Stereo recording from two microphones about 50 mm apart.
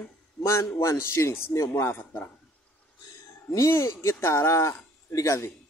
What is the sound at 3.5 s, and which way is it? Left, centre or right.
Speech, left.